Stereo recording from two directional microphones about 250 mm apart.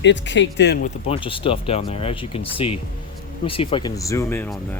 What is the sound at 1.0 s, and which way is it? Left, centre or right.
Speech, left.